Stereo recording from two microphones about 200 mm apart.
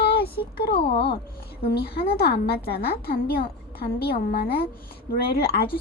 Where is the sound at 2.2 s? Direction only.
55° left (ahead or behind).